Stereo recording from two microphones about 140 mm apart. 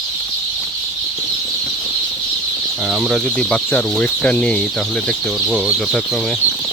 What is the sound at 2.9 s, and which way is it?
Speech, 5° right (ahead or behind).